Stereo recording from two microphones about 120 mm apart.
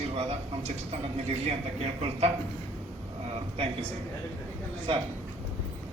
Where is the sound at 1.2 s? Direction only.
60° right (ahead or behind).